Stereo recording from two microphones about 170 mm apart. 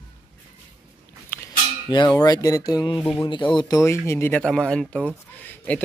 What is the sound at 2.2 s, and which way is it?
Speech, 20° left (ahead or behind).